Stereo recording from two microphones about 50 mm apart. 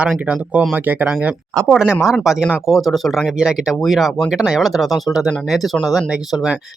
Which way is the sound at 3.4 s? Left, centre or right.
Centre.